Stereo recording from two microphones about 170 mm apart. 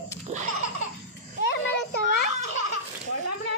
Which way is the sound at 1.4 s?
80° left.